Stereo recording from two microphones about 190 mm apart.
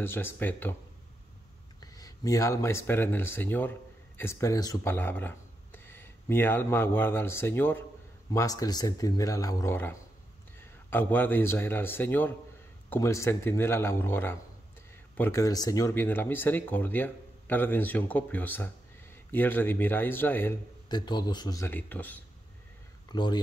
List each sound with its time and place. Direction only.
0.0 s speech: 10° left (ahead or behind)
1.9 s a man's voice: 20° left (ahead or behind)
20.9 s speech: 20° left (ahead or behind)
23.1 s speech: 25° left (ahead or behind)